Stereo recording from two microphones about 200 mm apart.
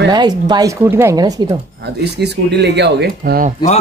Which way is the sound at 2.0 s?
55° right (ahead or behind).